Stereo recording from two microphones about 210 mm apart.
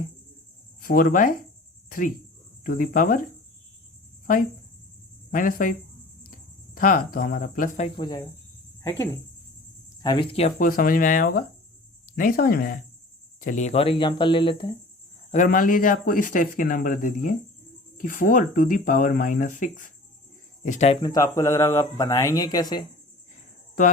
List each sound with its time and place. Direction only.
0.8 s speech: 40° left (ahead or behind)
5.3 s speech: 40° left (ahead or behind)
6.7 s speech: 40° left (ahead or behind)
7.9 s speech: 20° left (ahead or behind)
10.0 s speech: 20° left (ahead or behind)
15.3 s speech: 40° left (ahead or behind)
21.0 s speech: 15° left (ahead or behind)